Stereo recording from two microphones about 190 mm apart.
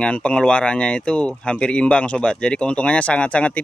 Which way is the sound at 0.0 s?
5° left (ahead or behind).